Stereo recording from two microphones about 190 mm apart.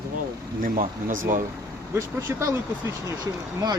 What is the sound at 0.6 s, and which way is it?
Speech, 45° right (ahead or behind).